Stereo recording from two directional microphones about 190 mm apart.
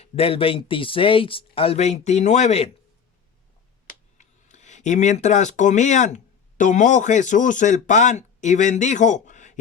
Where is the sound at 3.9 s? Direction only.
40° left (ahead or behind).